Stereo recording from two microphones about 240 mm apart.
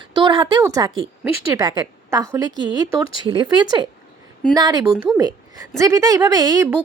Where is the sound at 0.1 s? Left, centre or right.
Centre.